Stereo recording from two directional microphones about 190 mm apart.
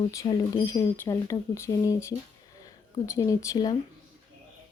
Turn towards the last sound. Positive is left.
turn(degrees=20)  # may be behind; listen again after turning